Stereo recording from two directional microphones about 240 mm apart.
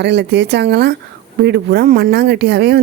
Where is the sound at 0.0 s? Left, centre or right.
Right.